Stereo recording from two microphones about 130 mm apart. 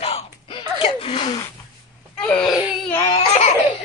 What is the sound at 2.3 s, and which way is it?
Baby cry, 5° left (ahead or behind).